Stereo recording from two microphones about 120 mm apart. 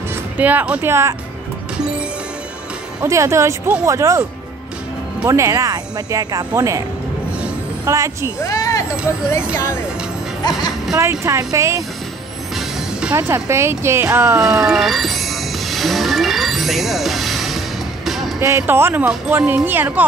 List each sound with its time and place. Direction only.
0.1 s speech: 15° right (ahead or behind)
3.0 s speech: 25° right (ahead or behind)
5.3 s speech: 25° right (ahead or behind)
7.8 s speech: 25° right (ahead or behind)
8.4 s vehicle: 30° left (ahead or behind)
9.3 s speech: 25° left (ahead or behind)
11.0 s speech: 25° right (ahead or behind)
12.5 s music: 5° right (ahead or behind)
13.1 s speech: 20° right (ahead or behind)
14.6 s music: centre (ahead or behind)
18.4 s speech: 20° right (ahead or behind)